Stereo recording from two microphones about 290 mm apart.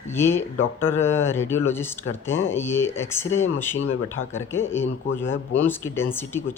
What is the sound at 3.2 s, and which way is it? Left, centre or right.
Speech, left.